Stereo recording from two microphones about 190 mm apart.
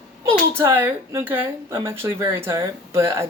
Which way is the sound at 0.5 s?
10° right (ahead or behind).